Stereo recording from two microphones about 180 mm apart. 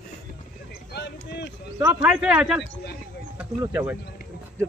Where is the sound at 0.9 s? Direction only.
65° left (ahead or behind).